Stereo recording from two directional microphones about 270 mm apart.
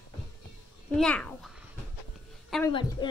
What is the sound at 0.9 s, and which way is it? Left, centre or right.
Speech, centre.